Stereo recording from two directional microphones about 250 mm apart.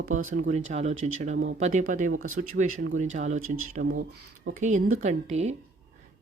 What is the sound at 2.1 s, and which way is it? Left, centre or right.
Speech, right.